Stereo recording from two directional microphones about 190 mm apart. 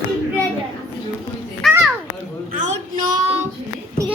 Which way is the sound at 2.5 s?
45° right (ahead or behind).